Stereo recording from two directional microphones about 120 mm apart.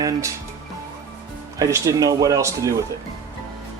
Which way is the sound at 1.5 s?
30° right (ahead or behind).